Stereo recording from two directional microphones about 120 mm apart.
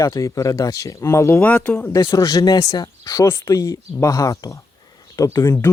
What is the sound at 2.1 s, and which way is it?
Speech, 30° left (ahead or behind).